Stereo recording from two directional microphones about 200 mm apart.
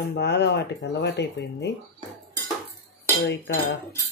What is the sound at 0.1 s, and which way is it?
Speech, 55° left (ahead or behind).